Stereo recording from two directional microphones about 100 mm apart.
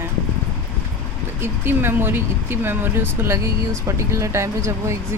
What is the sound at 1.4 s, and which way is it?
Speech, 20° right (ahead or behind).